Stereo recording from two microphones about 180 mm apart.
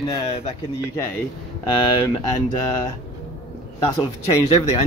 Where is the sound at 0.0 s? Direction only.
25° left (ahead or behind).